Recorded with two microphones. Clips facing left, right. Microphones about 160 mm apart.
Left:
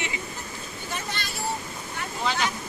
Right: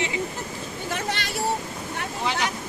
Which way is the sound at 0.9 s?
80° right.